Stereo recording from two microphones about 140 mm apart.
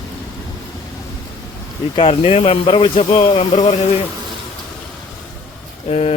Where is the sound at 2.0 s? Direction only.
45° left (ahead or behind).